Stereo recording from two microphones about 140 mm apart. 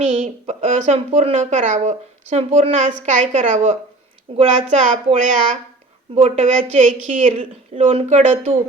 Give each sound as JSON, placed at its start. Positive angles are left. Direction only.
{"t": 0.0, "sound": "speech", "side_deg": -50}
{"t": 7.3, "sound": "speech", "side_deg": -45}